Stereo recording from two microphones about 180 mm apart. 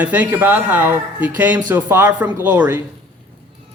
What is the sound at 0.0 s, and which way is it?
A man's voice, 10° right (ahead or behind).